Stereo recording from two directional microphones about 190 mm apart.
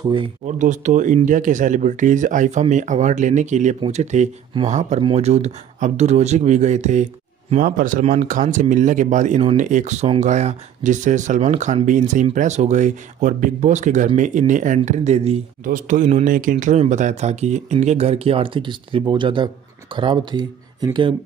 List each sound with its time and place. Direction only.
0.6 s speech: 40° right (ahead or behind); by 21.1 s 25° right (ahead or behind)